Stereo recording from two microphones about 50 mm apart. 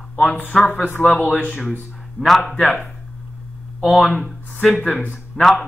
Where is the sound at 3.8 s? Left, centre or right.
Centre.